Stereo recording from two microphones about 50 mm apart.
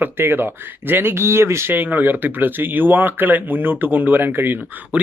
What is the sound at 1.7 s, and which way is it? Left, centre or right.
Speech, right.